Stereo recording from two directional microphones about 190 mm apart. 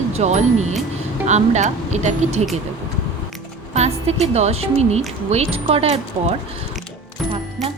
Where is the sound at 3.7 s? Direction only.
35° right (ahead or behind).